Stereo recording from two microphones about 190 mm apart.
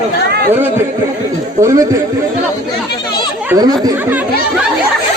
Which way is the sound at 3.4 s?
20° right (ahead or behind).